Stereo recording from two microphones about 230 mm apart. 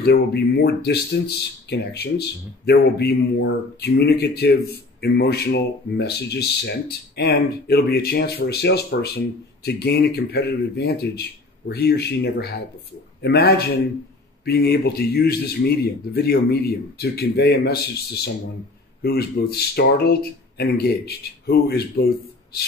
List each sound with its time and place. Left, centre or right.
0.0 s speech: left